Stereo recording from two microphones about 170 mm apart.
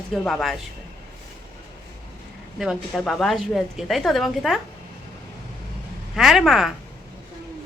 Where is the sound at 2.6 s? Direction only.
Centre (ahead or behind).